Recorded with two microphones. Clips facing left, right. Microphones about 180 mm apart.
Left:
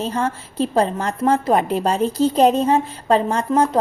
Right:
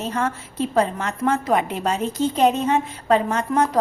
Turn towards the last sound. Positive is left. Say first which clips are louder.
# left 3 dB
turn(degrees=30)  # may be behind; listen again after turning